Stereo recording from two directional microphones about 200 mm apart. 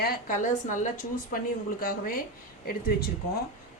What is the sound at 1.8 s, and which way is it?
Speech, 45° left (ahead or behind).